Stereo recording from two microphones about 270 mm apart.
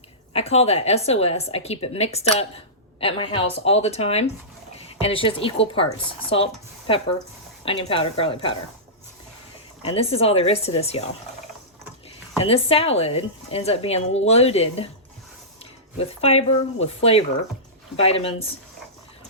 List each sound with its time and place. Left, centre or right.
0.3 s a woman's voice: left
9.8 s a woman's voice: left
12.4 s a woman's voice: left
16.0 s a woman's voice: left